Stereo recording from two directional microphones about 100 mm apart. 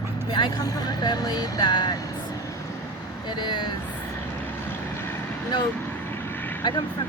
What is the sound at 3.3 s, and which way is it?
Speech, 50° left (ahead or behind).